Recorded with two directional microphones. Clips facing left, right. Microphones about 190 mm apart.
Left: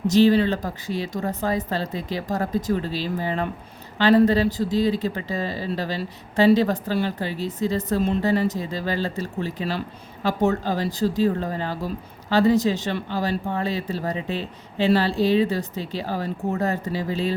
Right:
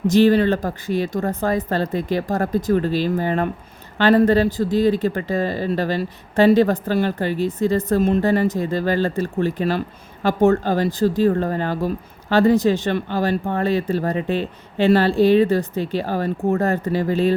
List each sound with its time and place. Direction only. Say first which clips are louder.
0.1 s speech: right 2 dB; 55° right (ahead or behind)